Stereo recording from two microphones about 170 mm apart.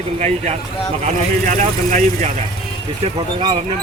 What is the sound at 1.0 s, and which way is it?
Speech, 45° right (ahead or behind).